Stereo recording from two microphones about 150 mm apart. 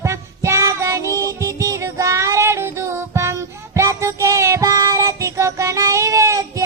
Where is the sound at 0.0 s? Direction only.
20° right (ahead or behind).